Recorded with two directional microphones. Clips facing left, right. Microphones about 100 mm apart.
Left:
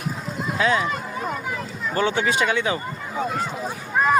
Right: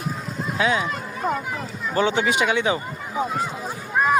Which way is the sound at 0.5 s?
5° right (ahead or behind).